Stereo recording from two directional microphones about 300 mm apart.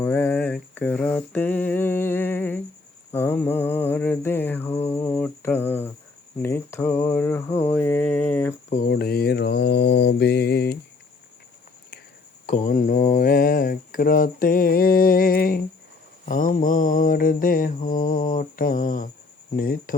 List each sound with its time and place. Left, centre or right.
0.0 s a sound: centre
3.1 s mantra: centre
6.4 s speech: centre
8.7 s mantra: left
12.5 s speech: left
16.3 s mantra: left